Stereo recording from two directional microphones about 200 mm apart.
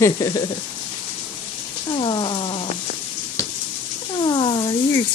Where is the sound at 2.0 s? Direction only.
25° left (ahead or behind).